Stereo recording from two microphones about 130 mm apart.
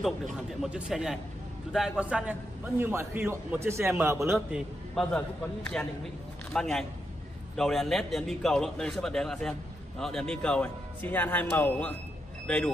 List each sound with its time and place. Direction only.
0.0 s a man's voice: centre (ahead or behind); by 4.4 s 20° right (ahead or behind)
4.5 s a man's voice: 5° right (ahead or behind)
5.0 s a man's voice: 5° left (ahead or behind)